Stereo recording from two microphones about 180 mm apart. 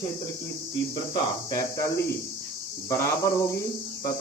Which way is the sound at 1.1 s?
20° left (ahead or behind).